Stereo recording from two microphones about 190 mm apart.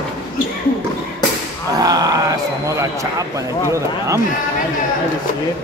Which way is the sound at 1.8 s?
20° right (ahead or behind).